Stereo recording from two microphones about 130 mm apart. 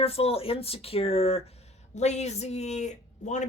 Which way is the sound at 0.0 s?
50° left (ahead or behind).